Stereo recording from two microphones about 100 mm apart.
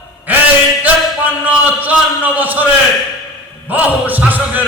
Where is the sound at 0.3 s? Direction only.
15° right (ahead or behind).